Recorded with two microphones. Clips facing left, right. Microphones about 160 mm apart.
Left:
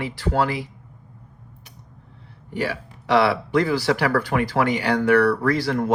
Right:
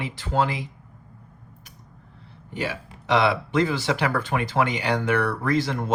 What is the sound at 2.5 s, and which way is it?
Speech, 20° right (ahead or behind).